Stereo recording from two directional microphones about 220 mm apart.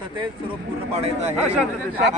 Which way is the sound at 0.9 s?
30° right (ahead or behind).